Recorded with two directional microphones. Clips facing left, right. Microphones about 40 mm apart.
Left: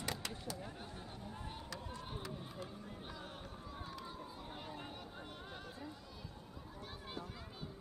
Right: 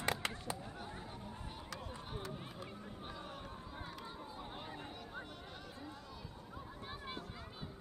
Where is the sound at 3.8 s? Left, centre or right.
Centre.